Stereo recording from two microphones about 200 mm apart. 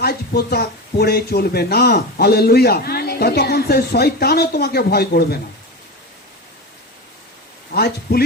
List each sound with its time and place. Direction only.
0.0 s speech: 50° left (ahead or behind)
7.7 s a man's voice: 50° left (ahead or behind)